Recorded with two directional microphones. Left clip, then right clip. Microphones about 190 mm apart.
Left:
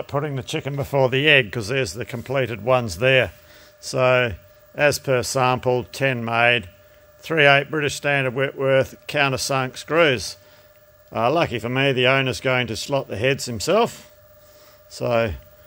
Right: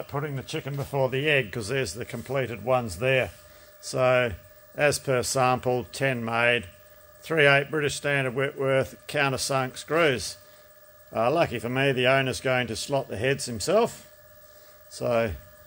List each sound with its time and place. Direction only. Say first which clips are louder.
0.0 s speech: left 7 dB; 65° left (ahead or behind)
3.8 s speech: left 4 dB; 35° left (ahead or behind)